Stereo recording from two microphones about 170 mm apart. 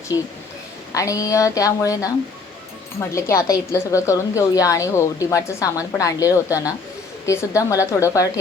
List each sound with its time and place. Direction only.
0.1 s a woman's voice: 25° left (ahead or behind)
3.2 s a woman's voice: 15° left (ahead or behind)